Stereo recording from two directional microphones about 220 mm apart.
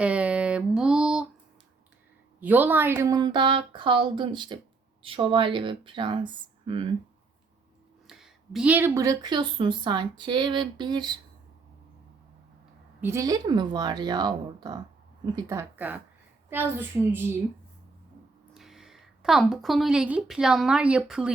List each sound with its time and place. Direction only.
0.0 s a sound: 5° right (ahead or behind)
2.4 s speech: 10° right (ahead or behind)
8.0 s speech: centre (ahead or behind); by 11.2 s 20° right (ahead or behind)
13.0 s a child's voice: 10° right (ahead or behind)
18.5 s a woman's voice: centre (ahead or behind)